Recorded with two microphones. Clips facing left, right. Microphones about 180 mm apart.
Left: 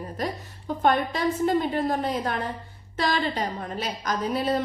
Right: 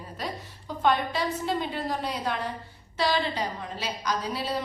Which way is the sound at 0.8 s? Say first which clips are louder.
Left 2 dB; 45° left (ahead or behind).